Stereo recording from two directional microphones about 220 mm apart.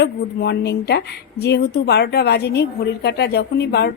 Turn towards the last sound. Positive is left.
turn(degrees=50)  # may be behind; listen again after turning